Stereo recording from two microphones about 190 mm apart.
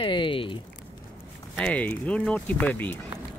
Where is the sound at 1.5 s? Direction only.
5° left (ahead or behind).